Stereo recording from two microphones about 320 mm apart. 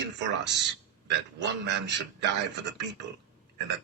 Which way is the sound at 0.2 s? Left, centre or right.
Right.